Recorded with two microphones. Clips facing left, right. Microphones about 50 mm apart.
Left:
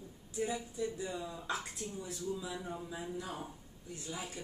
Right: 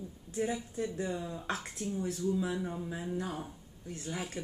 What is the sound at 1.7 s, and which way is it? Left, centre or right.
Speech, right.